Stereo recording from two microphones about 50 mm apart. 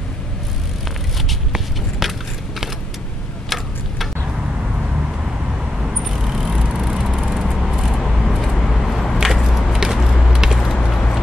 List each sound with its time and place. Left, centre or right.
1.5 s walk: centre
3.4 s tick-tock: centre
5.8 s vehicle: centre
7.4 s a sound: centre
7.7 s vehicle: centre
8.0 s vehicle: centre
9.2 s a sound: centre